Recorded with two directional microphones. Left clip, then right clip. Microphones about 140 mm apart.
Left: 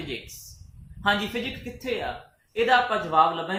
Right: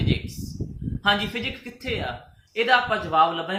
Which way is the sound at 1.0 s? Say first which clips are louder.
Right 2 dB; 20° right (ahead or behind).